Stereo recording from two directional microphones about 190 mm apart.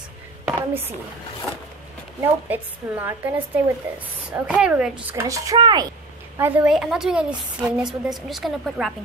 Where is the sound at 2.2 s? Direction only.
10° right (ahead or behind).